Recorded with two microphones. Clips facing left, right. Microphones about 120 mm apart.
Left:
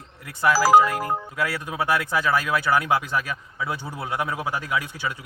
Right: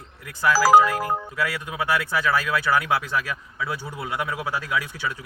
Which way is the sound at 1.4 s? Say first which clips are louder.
Left 1 dB; 20° left (ahead or behind).